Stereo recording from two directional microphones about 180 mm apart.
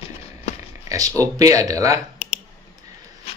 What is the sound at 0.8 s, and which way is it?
Speech, 20° right (ahead or behind).